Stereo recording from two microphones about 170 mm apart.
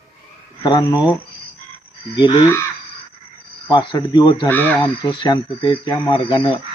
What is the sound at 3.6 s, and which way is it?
Speech, 25° left (ahead or behind).